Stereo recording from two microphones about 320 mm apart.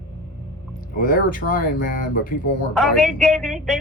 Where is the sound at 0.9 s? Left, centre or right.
Left.